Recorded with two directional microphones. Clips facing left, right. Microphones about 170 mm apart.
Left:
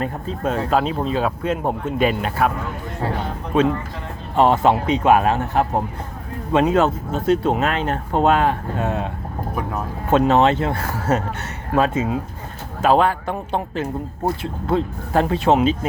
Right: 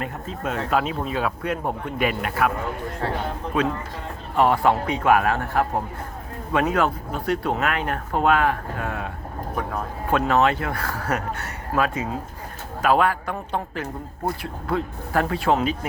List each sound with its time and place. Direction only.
0.0 s speech: 35° left (ahead or behind)
3.5 s speech: 25° left (ahead or behind)
10.1 s speech: 25° left (ahead or behind)